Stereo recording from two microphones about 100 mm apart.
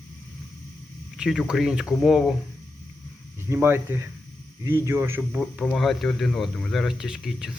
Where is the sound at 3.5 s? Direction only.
20° right (ahead or behind).